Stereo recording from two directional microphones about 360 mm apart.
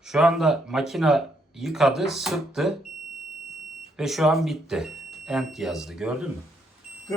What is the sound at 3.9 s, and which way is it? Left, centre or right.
A man's voice, centre.